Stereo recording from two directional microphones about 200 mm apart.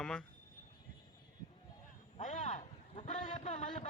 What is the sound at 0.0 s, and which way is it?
Speech, 5° left (ahead or behind).